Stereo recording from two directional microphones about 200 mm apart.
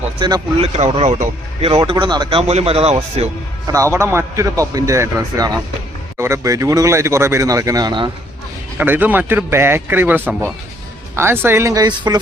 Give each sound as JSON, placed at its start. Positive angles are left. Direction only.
{"t": 0.2, "sound": "a man's voice", "side_deg": -20}
{"t": 0.8, "sound": "a man's voice", "side_deg": -35}
{"t": 3.7, "sound": "speech", "side_deg": -15}
{"t": 8.8, "sound": "speech", "side_deg": -10}